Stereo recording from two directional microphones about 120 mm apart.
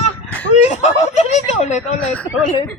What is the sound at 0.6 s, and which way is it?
Speech, 70° left (ahead or behind).